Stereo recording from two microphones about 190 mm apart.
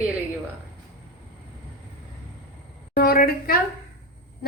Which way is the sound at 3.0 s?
50° left (ahead or behind).